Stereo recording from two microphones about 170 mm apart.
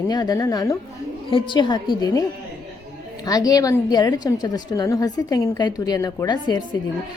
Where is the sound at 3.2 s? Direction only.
20° left (ahead or behind).